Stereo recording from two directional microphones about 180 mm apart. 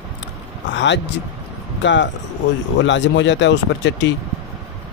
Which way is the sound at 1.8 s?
85° left.